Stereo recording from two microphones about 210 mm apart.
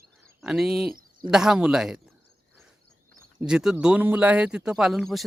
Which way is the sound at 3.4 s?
5° right (ahead or behind).